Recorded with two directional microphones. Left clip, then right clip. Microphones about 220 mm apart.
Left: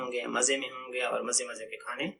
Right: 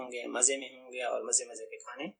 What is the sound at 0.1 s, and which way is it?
Speech, 35° right (ahead or behind).